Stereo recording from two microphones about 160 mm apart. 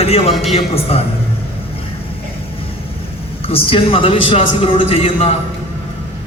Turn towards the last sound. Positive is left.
turn(degrees=40)  # may be behind; listen again after turning